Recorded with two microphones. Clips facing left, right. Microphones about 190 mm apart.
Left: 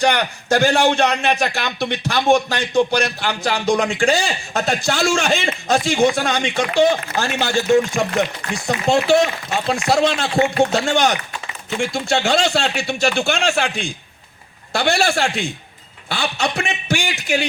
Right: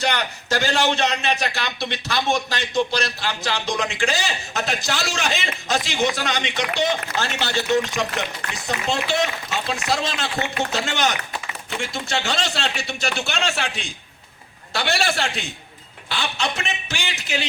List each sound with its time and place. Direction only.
0.1 s a man's voice: 50° left (ahead or behind)
16.6 s a man's voice: 50° left (ahead or behind)